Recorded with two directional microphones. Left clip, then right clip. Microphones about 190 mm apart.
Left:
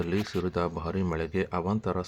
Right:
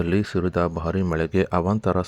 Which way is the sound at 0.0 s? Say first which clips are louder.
Right 6 dB; 30° right (ahead or behind).